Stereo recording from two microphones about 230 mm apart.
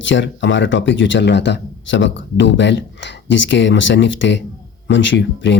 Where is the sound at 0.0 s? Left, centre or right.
Left.